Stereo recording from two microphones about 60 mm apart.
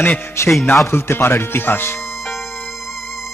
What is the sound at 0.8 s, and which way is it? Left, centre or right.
Speech, left.